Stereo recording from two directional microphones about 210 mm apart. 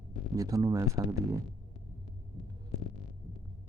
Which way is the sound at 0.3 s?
15° right (ahead or behind).